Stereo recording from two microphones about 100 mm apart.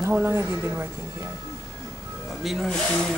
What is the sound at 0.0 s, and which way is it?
Speech, 20° right (ahead or behind).